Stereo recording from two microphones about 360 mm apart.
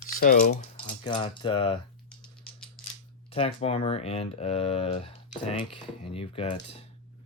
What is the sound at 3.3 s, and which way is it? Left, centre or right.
Speech, centre.